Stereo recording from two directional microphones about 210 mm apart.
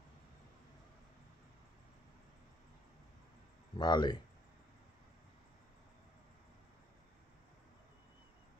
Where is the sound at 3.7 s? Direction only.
20° left (ahead or behind).